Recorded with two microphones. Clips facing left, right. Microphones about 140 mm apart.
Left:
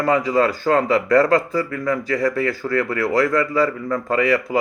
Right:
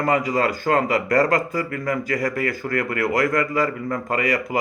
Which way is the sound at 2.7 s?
35° left (ahead or behind).